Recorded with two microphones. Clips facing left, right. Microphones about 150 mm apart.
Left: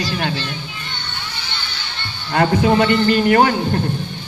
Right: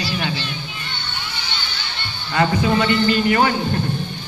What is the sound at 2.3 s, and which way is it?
A man's voice, 55° left (ahead or behind).